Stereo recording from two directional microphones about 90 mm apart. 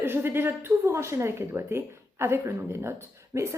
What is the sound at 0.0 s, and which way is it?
A woman's voice, 25° right (ahead or behind).